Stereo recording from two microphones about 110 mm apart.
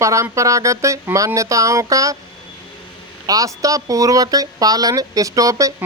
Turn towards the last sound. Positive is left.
turn(degrees=-30)  # may be behind; listen again after turning